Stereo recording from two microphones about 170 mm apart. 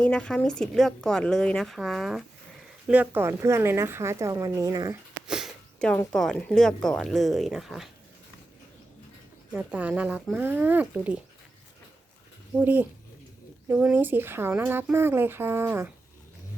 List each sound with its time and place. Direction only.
0.0 s a woman's voice: 5° left (ahead or behind); by 4.9 s 20° right (ahead or behind)
5.3 s sniff: centre (ahead or behind)
5.9 s a woman's voice: 5° left (ahead or behind)
9.5 s speech: 10° right (ahead or behind)
12.5 s speech: 10° right (ahead or behind)